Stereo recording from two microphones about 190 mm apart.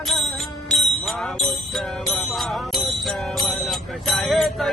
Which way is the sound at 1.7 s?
Centre (ahead or behind).